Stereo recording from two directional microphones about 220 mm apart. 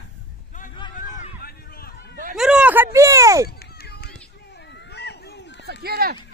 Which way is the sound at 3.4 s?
45° left (ahead or behind).